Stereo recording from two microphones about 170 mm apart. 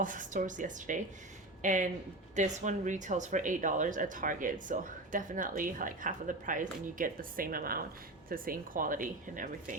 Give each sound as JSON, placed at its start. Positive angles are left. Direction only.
{"t": 0.0, "sound": "speech", "side_deg": -50}